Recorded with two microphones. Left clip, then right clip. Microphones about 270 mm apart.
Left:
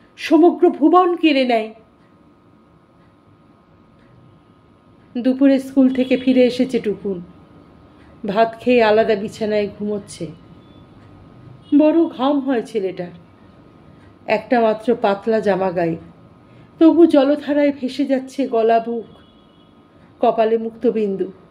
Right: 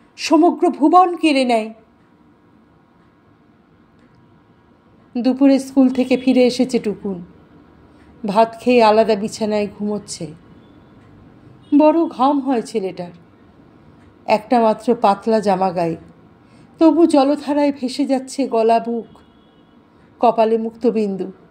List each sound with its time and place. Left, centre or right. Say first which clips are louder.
0.1 s a woman's voice: left 1 dB; centre
5.1 s a woman's voice: right 1 dB; right
8.3 s a woman's voice: right 1 dB; right
11.7 s a woman's voice: right 1 dB; right
14.2 s a woman's voice: right 2 dB; right
20.2 s a woman's voice: right 1 dB; right